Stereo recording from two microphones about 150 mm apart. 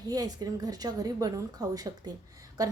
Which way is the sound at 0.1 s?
25° right (ahead or behind).